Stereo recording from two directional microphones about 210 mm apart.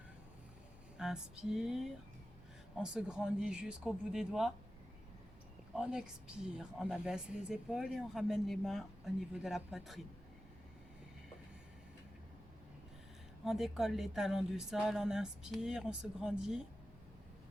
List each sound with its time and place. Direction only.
0.9 s speech: 5° right (ahead or behind)
5.7 s speech: 5° right (ahead or behind)
13.4 s speech: centre (ahead or behind)